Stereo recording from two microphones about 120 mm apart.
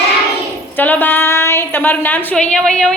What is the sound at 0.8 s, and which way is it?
A woman's voice, 15° left (ahead or behind).